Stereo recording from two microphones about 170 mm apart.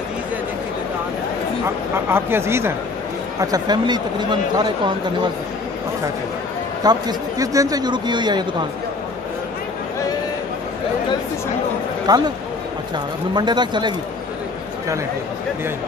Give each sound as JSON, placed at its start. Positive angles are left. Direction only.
{"t": 2.0, "sound": "speech", "side_deg": -15}
{"t": 6.8, "sound": "speech", "side_deg": -25}
{"t": 12.1, "sound": "speech", "side_deg": -25}